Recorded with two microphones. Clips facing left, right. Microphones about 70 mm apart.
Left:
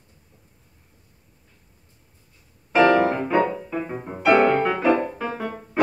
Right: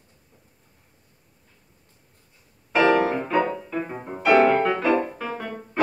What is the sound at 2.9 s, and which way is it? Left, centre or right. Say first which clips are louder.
Music: left 2 dB; centre.